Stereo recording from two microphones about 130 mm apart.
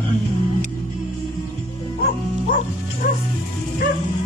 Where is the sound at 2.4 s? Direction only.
90° left.